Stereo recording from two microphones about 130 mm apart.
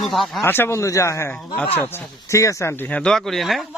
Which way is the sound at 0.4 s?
15° left (ahead or behind).